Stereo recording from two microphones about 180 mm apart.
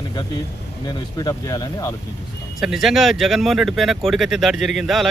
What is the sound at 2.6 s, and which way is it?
Speech, centre (ahead or behind).